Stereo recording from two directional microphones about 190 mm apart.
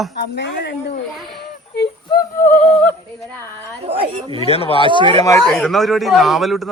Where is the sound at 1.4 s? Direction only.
65° left (ahead or behind).